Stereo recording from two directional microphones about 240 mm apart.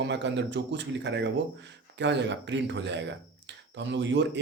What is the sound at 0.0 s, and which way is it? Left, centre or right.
A man's voice, right.